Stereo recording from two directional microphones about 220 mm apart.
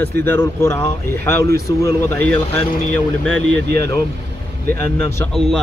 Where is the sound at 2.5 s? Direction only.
30° left (ahead or behind).